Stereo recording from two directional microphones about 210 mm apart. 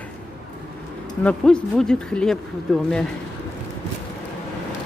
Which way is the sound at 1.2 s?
5° left (ahead or behind).